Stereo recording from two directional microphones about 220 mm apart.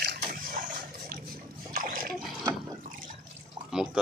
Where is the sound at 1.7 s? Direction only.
40° right (ahead or behind).